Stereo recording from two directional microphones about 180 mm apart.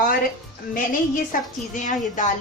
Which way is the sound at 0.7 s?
50° left (ahead or behind).